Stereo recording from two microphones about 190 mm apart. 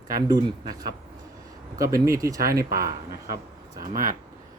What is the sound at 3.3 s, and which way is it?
Speech, 50° right (ahead or behind).